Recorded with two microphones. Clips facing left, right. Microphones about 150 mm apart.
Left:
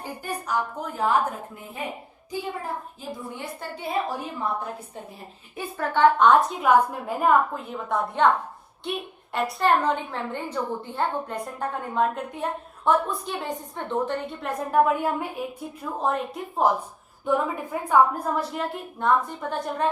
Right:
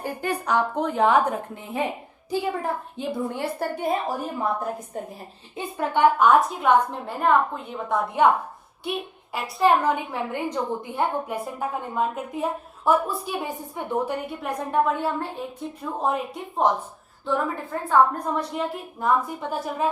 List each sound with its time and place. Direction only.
0.0 s a woman's voice: 65° right (ahead or behind)
0.9 s a woman's voice: 80° right
3.2 s a woman's voice: 60° right (ahead or behind)
5.5 s a woman's voice: 20° right (ahead or behind)